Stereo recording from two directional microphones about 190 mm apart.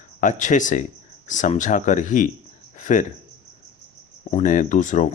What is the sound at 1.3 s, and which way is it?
Speech, 40° left (ahead or behind).